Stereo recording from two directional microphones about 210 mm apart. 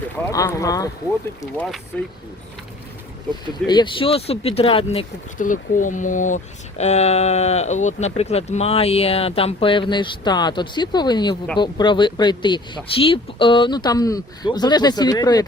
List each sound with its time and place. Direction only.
0.3 s speech: 15° left (ahead or behind)
1.9 s speech: 5° left (ahead or behind)
3.5 s speech: 20° left (ahead or behind)
5.4 s speech: 40° left (ahead or behind); by 15.4 s 20° left (ahead or behind)